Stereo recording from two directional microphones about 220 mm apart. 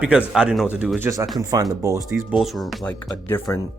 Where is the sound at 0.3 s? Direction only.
Centre (ahead or behind).